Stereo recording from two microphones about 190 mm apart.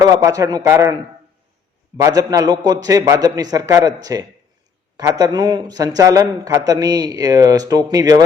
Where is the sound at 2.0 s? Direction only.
15° right (ahead or behind).